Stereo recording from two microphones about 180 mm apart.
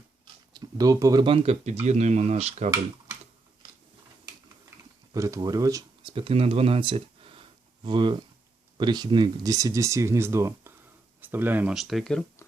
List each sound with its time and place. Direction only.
0.5 s speech: 20° right (ahead or behind); by 2.6 s 35° right (ahead or behind)
5.1 s speech: 20° right (ahead or behind); by 12.2 s centre (ahead or behind)